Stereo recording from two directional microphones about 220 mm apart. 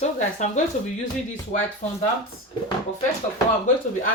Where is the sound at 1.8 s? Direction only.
35° left (ahead or behind).